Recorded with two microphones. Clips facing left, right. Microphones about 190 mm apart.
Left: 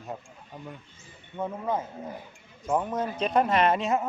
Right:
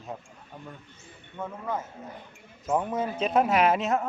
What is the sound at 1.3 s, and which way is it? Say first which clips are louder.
Speech: left 3 dB; 15° left (ahead or behind).